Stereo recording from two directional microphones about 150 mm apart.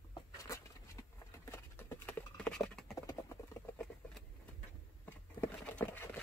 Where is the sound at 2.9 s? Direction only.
20° left (ahead or behind).